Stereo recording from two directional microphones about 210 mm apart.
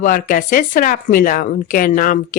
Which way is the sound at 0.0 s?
40° left (ahead or behind).